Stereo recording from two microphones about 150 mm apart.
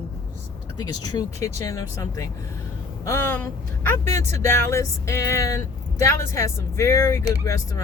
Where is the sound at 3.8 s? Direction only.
20° left (ahead or behind).